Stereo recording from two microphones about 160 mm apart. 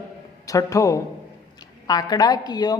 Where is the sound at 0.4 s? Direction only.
20° left (ahead or behind).